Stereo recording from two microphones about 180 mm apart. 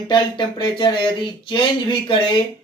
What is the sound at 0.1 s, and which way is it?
Speech, 25° left (ahead or behind).